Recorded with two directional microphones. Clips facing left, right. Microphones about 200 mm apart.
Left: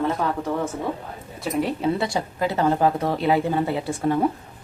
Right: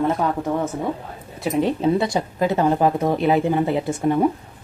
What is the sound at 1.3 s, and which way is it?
A woman's voice, 20° right (ahead or behind).